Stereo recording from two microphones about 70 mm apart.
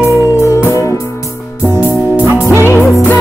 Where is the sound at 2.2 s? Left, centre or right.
Right.